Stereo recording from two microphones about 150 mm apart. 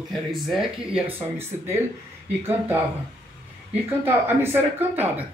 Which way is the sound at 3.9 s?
15° right (ahead or behind).